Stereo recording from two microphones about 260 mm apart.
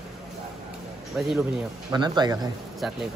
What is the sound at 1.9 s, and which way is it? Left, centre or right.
Speech, centre.